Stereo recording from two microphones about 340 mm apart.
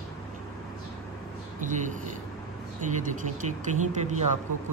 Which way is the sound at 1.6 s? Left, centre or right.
Right.